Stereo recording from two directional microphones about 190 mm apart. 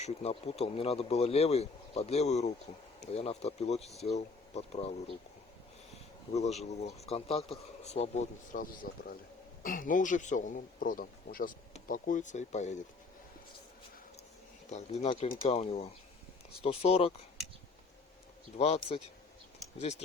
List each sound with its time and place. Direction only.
0.0 s speech: 35° left (ahead or behind)
6.3 s speech: 35° left (ahead or behind)
14.7 s speech: 35° left (ahead or behind)
18.5 s speech: 35° left (ahead or behind)